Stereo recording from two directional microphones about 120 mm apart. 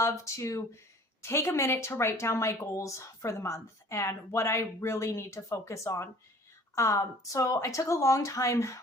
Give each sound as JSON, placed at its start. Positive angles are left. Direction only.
{"t": 0.0, "sound": "speech", "side_deg": 25}